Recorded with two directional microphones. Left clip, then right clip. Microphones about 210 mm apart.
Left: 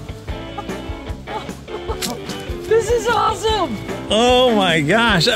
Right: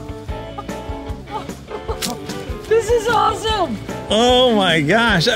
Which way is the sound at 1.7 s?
5° right (ahead or behind).